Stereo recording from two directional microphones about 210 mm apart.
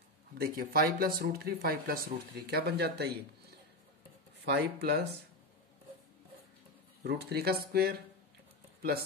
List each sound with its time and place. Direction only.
0.3 s speech: 45° right (ahead or behind)
7.0 s speech: 50° right (ahead or behind)